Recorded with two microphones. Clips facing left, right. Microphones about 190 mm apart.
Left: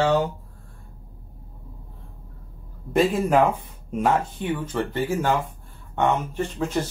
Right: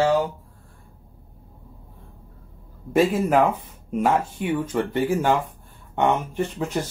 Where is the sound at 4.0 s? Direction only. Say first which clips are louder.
Right 1 dB; 10° right (ahead or behind).